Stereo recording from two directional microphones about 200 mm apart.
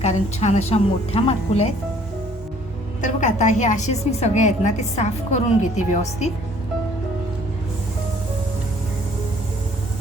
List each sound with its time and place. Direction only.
0.0 s a woman's voice: 35° left (ahead or behind)
3.0 s a woman's voice: 35° left (ahead or behind)